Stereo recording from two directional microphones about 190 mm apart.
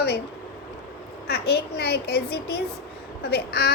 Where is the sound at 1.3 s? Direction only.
55° left (ahead or behind).